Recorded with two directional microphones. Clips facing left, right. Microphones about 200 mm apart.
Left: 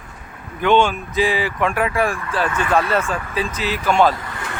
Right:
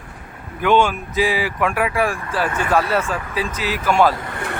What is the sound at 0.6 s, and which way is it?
Speech, 5° right (ahead or behind).